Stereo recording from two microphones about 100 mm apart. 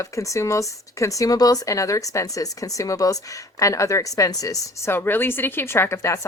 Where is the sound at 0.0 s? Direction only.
30° left (ahead or behind).